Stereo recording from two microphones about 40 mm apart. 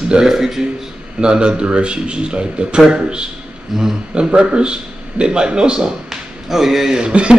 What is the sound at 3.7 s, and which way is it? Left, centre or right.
Speech, centre.